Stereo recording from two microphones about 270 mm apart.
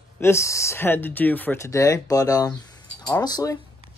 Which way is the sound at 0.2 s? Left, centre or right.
Centre.